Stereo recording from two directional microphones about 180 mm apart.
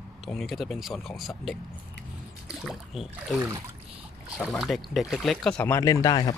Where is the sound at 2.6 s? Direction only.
Centre (ahead or behind).